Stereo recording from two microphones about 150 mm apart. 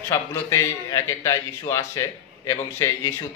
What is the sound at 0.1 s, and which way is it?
Speech, 20° left (ahead or behind).